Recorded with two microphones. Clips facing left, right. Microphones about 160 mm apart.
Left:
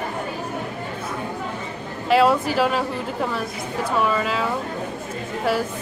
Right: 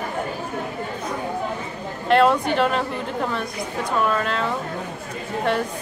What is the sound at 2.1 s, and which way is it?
A woman's voice, 5° left (ahead or behind).